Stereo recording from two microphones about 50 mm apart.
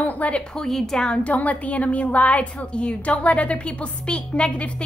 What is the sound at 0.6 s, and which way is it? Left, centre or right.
Speech, centre.